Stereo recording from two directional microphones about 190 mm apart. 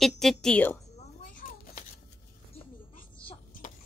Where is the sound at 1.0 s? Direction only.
45° left (ahead or behind).